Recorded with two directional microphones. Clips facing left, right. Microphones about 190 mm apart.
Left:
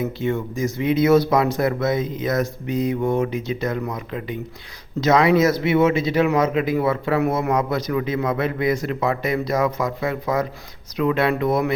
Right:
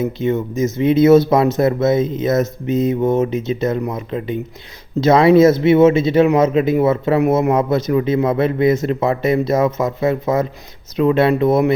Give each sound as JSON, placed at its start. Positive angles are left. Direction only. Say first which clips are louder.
{"t": 0.0, "sound": "speech", "louder": "right 5 dB", "side_deg": -20}